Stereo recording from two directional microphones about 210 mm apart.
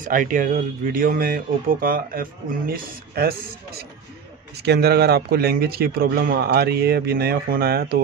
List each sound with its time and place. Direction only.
0.0 s speech: 40° right (ahead or behind)